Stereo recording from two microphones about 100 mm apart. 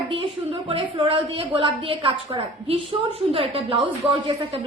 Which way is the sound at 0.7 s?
70° right (ahead or behind).